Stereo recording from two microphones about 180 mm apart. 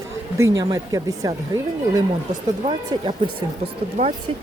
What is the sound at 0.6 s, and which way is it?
Speech, 20° right (ahead or behind).